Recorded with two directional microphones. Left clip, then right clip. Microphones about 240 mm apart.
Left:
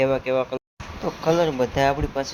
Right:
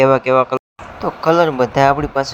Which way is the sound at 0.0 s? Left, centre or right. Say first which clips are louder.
Right 9 dB; centre.